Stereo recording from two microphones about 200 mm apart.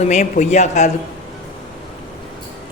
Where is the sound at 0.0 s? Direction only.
35° left (ahead or behind).